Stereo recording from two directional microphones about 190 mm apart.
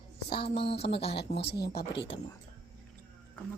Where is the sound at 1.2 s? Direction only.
60° left (ahead or behind).